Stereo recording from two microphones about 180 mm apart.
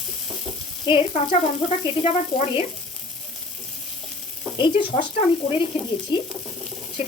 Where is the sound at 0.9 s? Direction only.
25° left (ahead or behind).